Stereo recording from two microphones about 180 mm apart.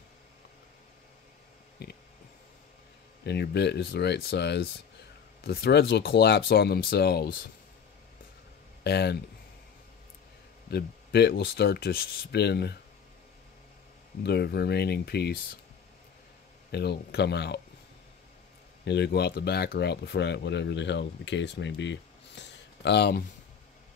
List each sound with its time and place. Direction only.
1.8 s a sound: 60° left (ahead or behind)
3.3 s speech: 70° left (ahead or behind)
8.8 s speech: 65° left (ahead or behind)
10.7 s speech: 65° left (ahead or behind)
14.2 s speech: 65° left (ahead or behind)
16.7 s speech: 65° left (ahead or behind)
18.9 s speech: 70° left (ahead or behind)